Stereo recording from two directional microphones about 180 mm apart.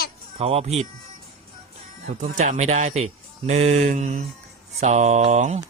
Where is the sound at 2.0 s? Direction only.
40° right (ahead or behind).